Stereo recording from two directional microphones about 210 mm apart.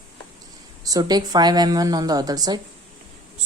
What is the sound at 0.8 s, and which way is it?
A woman's voice, 15° right (ahead or behind).